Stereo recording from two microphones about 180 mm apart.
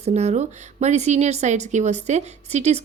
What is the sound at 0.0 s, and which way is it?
A woman's voice, 40° right (ahead or behind).